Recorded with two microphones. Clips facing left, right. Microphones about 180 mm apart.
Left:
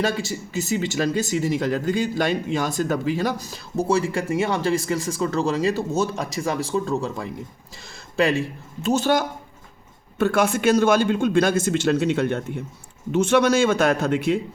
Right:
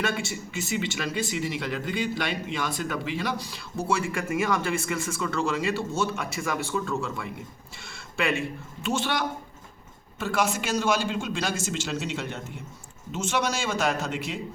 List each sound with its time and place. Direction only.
0.0 s speech: 35° left (ahead or behind)
10.2 s a man's voice: 60° left (ahead or behind)